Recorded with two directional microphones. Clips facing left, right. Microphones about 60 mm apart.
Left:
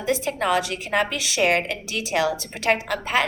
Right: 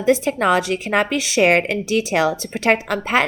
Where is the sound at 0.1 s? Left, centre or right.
Right.